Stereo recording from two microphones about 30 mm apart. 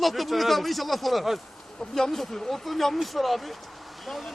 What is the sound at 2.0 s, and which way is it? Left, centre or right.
A man's voice, centre.